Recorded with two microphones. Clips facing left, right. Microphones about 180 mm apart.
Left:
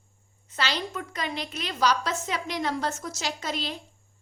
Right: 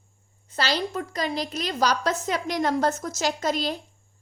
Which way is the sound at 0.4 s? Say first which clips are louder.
Right 4 dB; 35° right (ahead or behind).